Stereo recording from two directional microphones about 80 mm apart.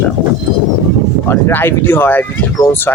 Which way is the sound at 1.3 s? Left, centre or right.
Left.